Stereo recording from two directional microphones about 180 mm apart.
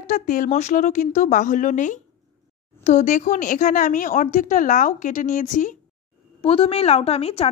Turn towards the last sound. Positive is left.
turn(degrees=35)  # may be behind; listen again after turning